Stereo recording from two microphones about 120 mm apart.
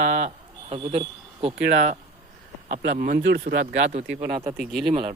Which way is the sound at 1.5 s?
75° right (ahead or behind).